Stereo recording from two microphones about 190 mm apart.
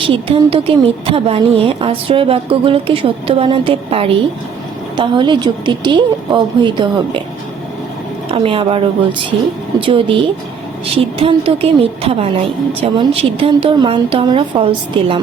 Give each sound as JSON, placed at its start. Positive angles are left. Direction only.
{"t": 0.1, "sound": "a woman's voice", "side_deg": -25}
{"t": 8.3, "sound": "a woman's voice", "side_deg": -30}